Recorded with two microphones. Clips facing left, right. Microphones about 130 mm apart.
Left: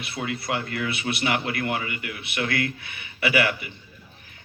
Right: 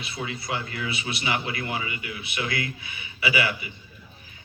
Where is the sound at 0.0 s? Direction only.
60° left (ahead or behind).